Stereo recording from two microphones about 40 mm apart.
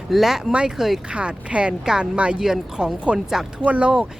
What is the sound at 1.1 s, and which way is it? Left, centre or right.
Speech, right.